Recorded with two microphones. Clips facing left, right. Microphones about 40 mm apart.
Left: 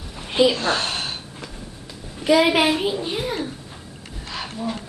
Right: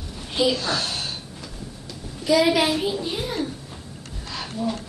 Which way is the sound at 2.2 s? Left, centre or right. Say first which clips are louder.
Left 2 dB; left.